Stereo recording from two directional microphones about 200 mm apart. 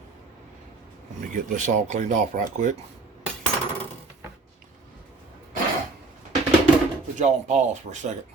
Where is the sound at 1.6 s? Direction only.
35° right (ahead or behind).